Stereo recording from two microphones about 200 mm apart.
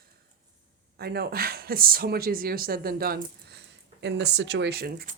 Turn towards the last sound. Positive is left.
turn(degrees=-45)  # may be behind; listen again after turning